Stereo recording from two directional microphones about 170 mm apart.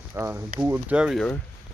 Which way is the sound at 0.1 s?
15° right (ahead or behind).